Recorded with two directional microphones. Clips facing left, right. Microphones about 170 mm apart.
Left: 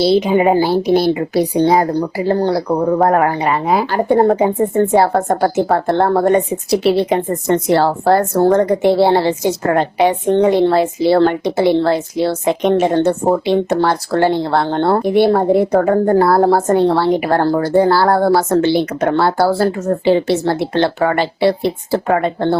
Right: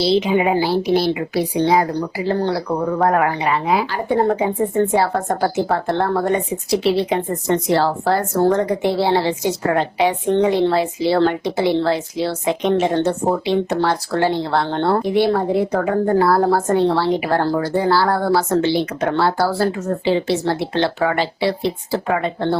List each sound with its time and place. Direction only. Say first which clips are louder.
0.0 s a woman's voice: left 4 dB; 45° left (ahead or behind)
15.3 s a woman's voice: left 5 dB; 45° left (ahead or behind)